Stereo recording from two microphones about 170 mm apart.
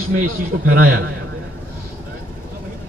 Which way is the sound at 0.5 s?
90° right.